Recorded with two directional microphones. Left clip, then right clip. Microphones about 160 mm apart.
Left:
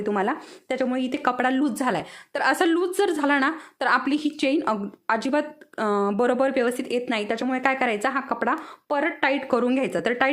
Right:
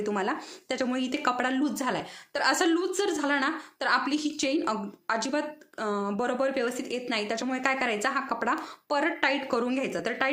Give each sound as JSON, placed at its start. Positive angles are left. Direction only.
{"t": 0.0, "sound": "speech", "side_deg": 35}